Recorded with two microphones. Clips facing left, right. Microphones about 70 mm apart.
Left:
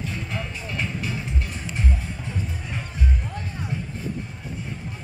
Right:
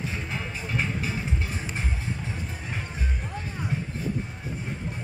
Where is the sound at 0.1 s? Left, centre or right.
Centre.